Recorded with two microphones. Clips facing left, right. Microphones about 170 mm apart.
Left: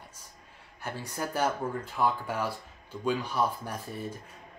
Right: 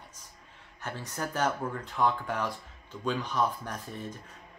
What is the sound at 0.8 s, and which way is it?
Speech, 10° left (ahead or behind).